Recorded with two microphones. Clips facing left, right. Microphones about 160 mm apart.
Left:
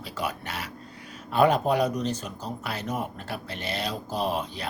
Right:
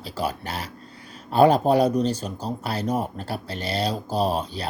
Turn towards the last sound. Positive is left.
turn(degrees=-35)  # may be behind; listen again after turning